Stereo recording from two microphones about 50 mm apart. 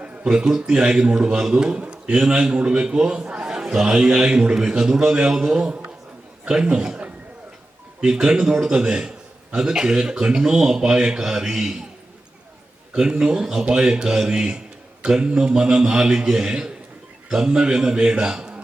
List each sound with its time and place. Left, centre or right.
0.0 s a sound: right
0.5 s a man's voice: centre
8.2 s a man's voice: centre
12.9 s a man's voice: centre